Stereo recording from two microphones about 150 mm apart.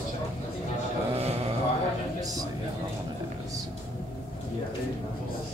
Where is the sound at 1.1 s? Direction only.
45° right (ahead or behind).